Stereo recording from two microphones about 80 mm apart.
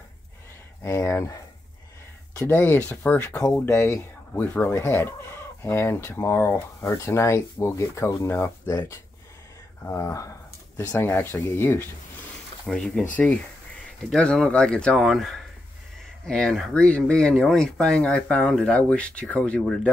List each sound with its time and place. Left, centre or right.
0.8 s speech: left
2.4 s speech: left
9.8 s speech: left
10.9 s speech: left
12.6 s speech: centre
15.0 s speech: centre